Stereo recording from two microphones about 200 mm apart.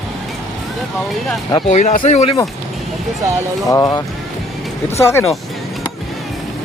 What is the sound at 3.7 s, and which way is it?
A man's voice, 15° left (ahead or behind).